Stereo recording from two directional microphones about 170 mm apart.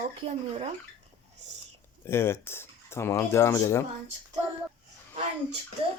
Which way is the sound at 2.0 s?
15° left (ahead or behind).